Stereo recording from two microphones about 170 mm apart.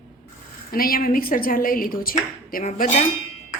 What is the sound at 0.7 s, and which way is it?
Speech, 60° left (ahead or behind).